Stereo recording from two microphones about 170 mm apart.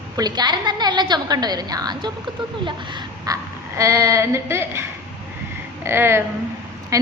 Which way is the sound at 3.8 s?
20° right (ahead or behind).